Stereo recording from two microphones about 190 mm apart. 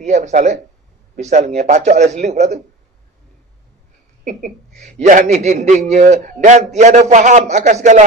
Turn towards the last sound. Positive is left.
turn(degrees=-40)  # may be behind; listen again after turning